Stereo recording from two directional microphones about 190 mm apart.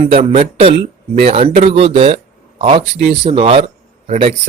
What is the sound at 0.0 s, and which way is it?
A man's voice, 30° right (ahead or behind).